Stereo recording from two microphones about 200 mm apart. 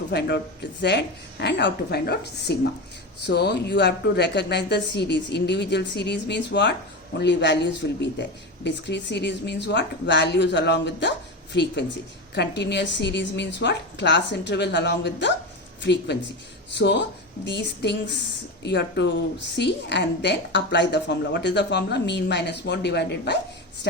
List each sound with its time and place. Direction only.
0.1 s a woman's voice: 55° left (ahead or behind)